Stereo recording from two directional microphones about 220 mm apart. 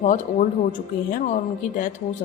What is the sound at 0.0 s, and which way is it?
A woman's voice, 35° left (ahead or behind).